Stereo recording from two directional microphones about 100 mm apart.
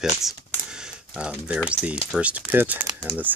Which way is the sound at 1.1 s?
10° right (ahead or behind).